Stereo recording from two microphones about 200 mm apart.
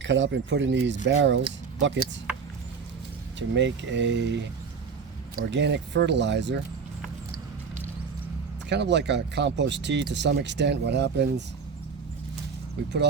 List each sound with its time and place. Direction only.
0.0 s speech: 65° right (ahead or behind)
3.3 s speech: 60° right (ahead or behind)
8.7 s speech: 60° right (ahead or behind)